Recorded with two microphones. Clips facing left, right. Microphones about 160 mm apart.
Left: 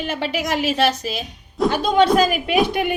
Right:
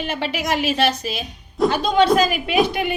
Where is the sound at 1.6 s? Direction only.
Centre (ahead or behind).